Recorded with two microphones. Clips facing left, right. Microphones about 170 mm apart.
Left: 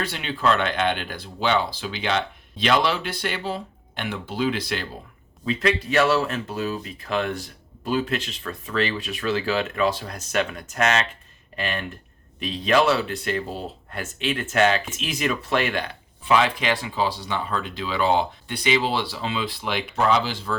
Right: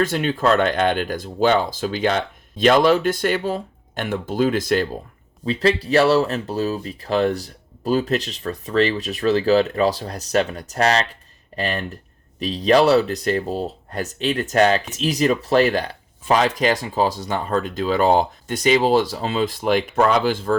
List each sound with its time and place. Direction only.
0.0 s speech: 45° right (ahead or behind)
5.5 s speech: 35° right (ahead or behind); by 20.6 s 50° right (ahead or behind)